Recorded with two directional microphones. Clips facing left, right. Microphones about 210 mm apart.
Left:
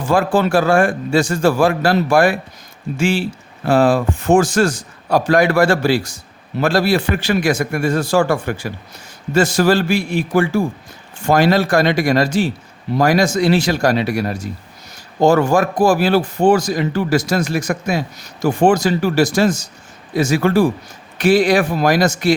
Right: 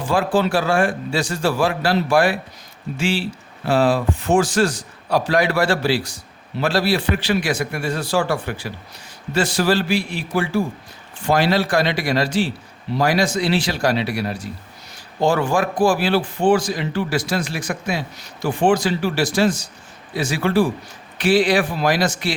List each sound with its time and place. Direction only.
0.0 s speech: 45° left (ahead or behind)